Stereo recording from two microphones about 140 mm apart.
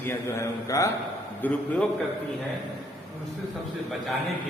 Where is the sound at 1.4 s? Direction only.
10° left (ahead or behind).